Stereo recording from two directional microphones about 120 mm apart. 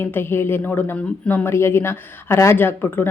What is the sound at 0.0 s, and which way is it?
Speech, 20° left (ahead or behind).